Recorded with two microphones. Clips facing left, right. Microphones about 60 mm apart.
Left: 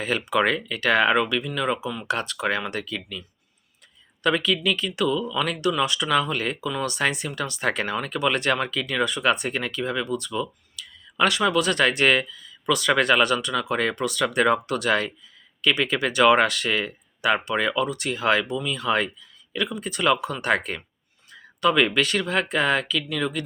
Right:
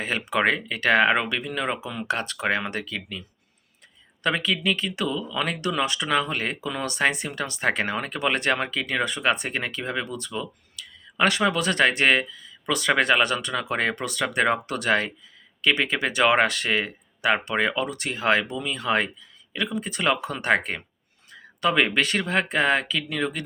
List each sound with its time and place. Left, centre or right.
0.0 s speech: right